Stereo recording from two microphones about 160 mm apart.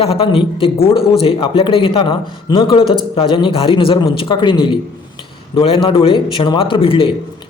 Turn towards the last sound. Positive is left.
turn(degrees=35)  # may be behind; listen again after turning